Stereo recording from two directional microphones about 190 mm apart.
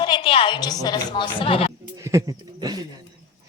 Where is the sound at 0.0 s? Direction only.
25° left (ahead or behind).